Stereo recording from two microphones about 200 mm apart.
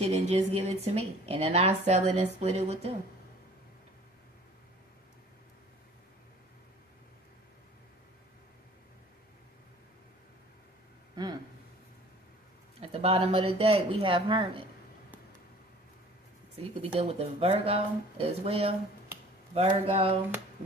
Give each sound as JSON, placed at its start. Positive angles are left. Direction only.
{"t": 0.0, "sound": "a woman's voice", "side_deg": -35}
{"t": 11.1, "sound": "a sound", "side_deg": -20}
{"t": 12.8, "sound": "speech", "side_deg": -30}
{"t": 17.0, "sound": "a woman's voice", "side_deg": -30}